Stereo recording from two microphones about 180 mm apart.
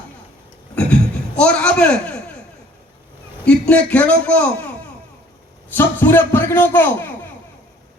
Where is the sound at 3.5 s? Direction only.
5° left (ahead or behind).